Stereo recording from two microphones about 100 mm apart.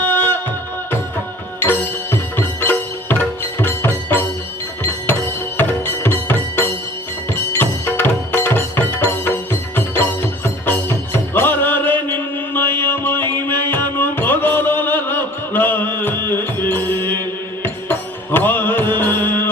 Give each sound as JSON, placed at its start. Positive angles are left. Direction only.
{"t": 0.0, "sound": "music", "side_deg": 20}
{"t": 1.5, "sound": "music", "side_deg": 20}